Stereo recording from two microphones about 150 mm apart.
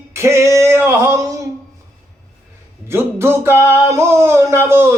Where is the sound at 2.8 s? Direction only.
15° right (ahead or behind).